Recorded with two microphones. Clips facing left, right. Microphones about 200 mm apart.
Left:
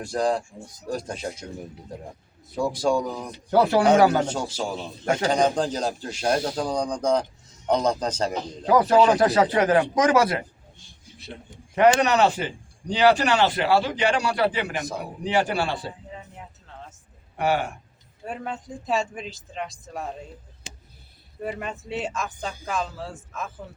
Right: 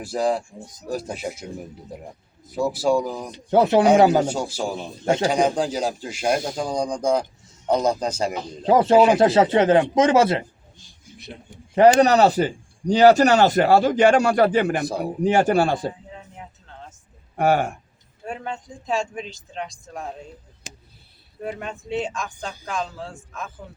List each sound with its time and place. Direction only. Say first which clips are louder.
0.0 s speech: right 1 dB; 5° right (ahead or behind)
2.6 s speech: right 2 dB; 5° right (ahead or behind)
3.5 s speech: right 3 dB; 20° right (ahead or behind)
4.1 s speech: right 4 dB; 10° right (ahead or behind)
8.6 s speech: right 3 dB; 25° right (ahead or behind)
11.7 s a man's voice: right 4 dB; 35° right (ahead or behind)
17.3 s speech: right 4 dB; 45° right (ahead or behind)
18.3 s speech: right 1 dB; 5° left (ahead or behind)
21.4 s speech: even; centre (ahead or behind)